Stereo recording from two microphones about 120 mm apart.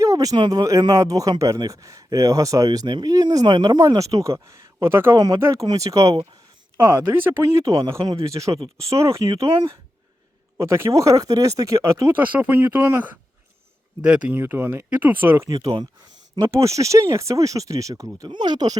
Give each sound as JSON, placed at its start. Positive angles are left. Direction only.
{"t": 0.0, "sound": "speech", "side_deg": -30}
{"t": 5.1, "sound": "speech", "side_deg": -30}
{"t": 12.4, "sound": "speech", "side_deg": -15}
{"t": 14.3, "sound": "speech", "side_deg": -20}
{"t": 15.4, "sound": "speech", "side_deg": -30}